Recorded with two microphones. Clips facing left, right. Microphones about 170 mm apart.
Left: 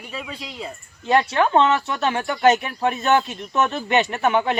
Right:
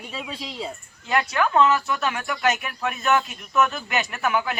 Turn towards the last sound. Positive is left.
turn(degrees=30)  # may be behind; listen again after turning